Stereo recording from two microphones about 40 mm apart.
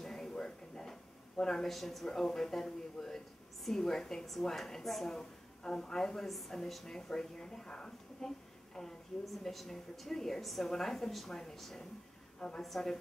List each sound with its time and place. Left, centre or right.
0.0 s a sound: centre
1.4 s speech: centre
2.0 s a woman's voice: centre
9.4 s a woman's voice: centre
12.4 s a woman's voice: left
12.6 s speech: centre